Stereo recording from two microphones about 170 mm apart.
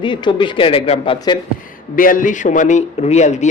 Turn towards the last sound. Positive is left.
turn(degrees=45)  # may be behind; listen again after turning